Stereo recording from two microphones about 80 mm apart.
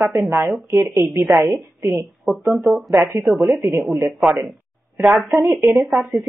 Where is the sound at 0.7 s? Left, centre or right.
Right.